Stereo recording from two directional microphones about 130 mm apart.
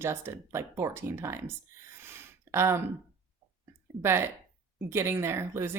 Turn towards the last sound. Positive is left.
turn(degrees=-15)  # may be behind; listen again after turning